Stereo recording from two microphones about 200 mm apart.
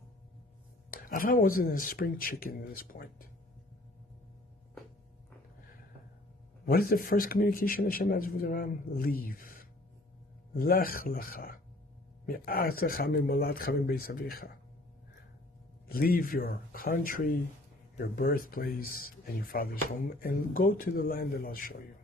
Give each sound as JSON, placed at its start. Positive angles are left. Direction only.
{"t": 0.9, "sound": "speech", "side_deg": 45}
{"t": 6.7, "sound": "speech", "side_deg": 45}
{"t": 15.9, "sound": "speech", "side_deg": 50}